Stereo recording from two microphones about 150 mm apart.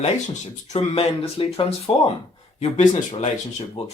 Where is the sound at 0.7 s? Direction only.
45° left (ahead or behind).